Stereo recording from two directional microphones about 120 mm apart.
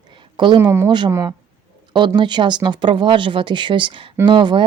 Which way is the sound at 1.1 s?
30° right (ahead or behind).